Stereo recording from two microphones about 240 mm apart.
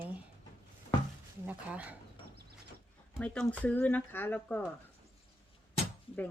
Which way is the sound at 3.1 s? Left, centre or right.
Centre.